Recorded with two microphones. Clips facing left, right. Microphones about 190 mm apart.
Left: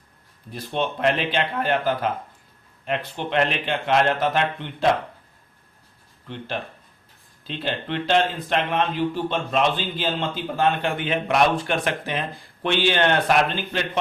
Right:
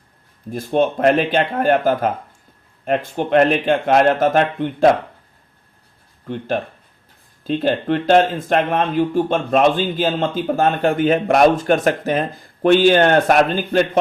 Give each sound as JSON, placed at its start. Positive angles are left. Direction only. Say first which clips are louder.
{"t": 0.5, "sound": "speech", "louder": "right 9 dB", "side_deg": -45}
{"t": 6.2, "sound": "speech", "louder": "right 8 dB", "side_deg": -45}